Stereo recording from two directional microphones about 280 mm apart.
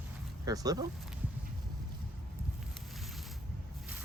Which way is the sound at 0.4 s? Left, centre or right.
Centre.